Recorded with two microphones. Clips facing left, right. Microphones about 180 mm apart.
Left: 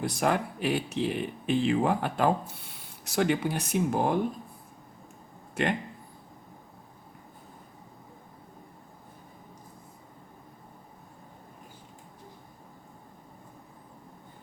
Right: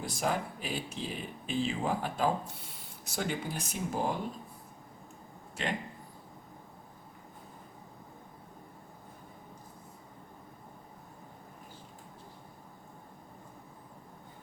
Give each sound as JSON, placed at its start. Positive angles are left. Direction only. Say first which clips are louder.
{"t": 0.0, "sound": "speech", "louder": "left 5 dB", "side_deg": 65}